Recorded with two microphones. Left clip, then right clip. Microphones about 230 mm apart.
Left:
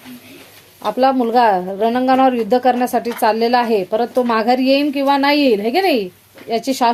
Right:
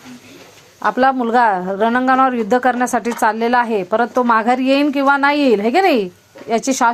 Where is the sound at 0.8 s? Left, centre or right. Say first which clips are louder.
Even; centre.